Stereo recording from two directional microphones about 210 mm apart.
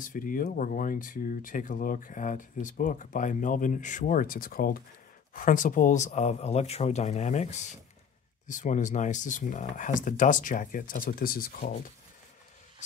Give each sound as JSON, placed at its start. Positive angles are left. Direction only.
{"t": 0.0, "sound": "speech", "side_deg": 40}